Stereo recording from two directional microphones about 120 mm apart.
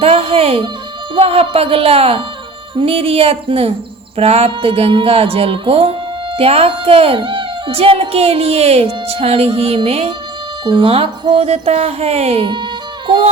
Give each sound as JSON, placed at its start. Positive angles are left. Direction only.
{"t": 0.0, "sound": "music", "side_deg": -55}
{"t": 1.1, "sound": "speech", "side_deg": -55}